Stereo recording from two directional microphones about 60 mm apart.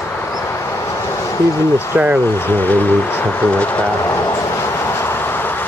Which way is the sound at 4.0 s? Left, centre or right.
Left.